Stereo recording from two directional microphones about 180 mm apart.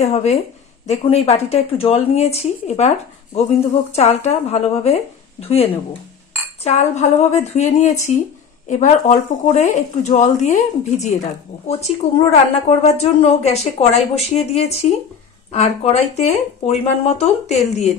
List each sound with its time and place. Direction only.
0.0 s speech: 40° left (ahead or behind)
3.9 s speech: 35° left (ahead or behind)